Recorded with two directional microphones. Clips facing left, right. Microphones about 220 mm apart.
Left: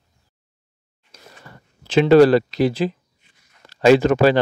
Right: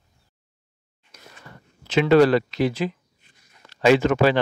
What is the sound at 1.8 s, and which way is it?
Speech, 30° left (ahead or behind).